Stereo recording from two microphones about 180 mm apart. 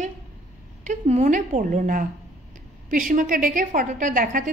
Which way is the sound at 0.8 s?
40° right (ahead or behind).